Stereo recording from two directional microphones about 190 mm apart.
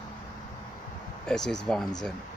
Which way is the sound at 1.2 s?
5° left (ahead or behind).